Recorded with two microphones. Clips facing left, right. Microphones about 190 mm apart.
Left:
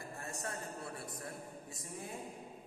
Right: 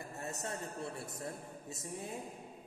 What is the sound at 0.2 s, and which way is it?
A man's voice, 20° right (ahead or behind).